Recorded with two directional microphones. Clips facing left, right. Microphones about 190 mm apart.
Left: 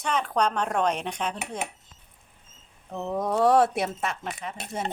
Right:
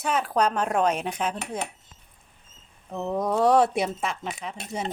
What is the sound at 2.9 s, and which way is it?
Dishes, centre (ahead or behind).